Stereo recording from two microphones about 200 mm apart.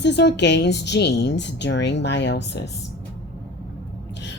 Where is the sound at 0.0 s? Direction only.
60° left (ahead or behind).